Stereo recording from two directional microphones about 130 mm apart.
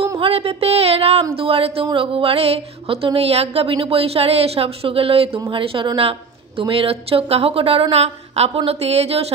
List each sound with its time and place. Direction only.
0.2 s a woman's voice: 50° right (ahead or behind)